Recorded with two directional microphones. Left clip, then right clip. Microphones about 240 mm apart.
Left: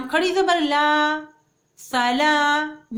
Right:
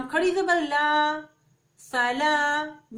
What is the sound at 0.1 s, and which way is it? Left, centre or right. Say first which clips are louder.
Speech: left 4 dB; left.